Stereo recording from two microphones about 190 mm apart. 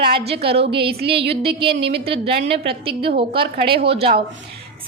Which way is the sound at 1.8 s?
60° right (ahead or behind).